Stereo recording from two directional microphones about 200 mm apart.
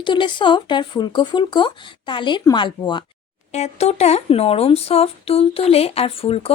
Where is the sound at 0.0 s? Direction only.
25° left (ahead or behind).